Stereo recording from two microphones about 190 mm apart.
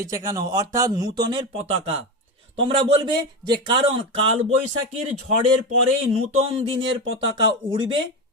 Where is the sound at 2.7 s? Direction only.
30° right (ahead or behind).